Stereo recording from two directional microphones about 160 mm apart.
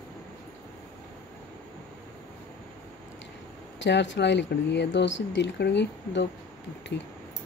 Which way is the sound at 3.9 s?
90° left.